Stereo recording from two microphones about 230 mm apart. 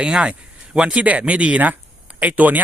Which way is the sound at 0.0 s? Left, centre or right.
Centre.